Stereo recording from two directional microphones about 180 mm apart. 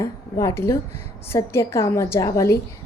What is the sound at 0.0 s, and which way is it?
A woman's voice, 15° left (ahead or behind).